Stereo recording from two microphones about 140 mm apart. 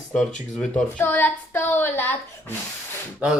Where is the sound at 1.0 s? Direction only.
10° left (ahead or behind).